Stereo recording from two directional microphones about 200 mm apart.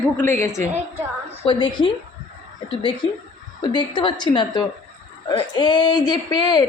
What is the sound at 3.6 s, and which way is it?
Speech, 20° left (ahead or behind).